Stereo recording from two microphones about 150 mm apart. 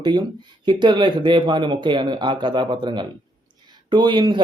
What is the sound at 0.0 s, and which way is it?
A man's voice, 30° right (ahead or behind).